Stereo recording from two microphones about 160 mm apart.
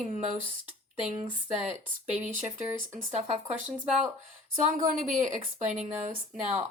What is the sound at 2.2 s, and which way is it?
A woman's voice, 55° right (ahead or behind).